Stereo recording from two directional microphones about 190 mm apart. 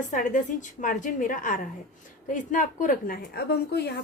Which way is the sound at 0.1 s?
45° left (ahead or behind).